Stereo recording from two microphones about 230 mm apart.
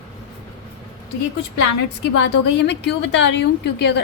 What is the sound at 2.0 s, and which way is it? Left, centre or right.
A woman's voice, left.